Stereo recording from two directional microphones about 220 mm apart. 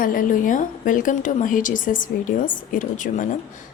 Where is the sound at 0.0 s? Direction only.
40° left (ahead or behind).